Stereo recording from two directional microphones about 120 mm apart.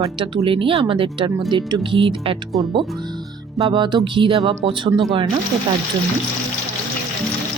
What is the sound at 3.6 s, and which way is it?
Speech, 40° right (ahead or behind).